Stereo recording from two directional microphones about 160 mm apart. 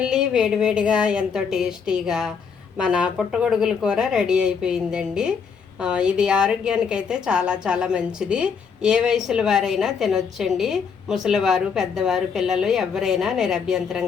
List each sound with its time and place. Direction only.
0.0 s a woman's voice: 5° right (ahead or behind)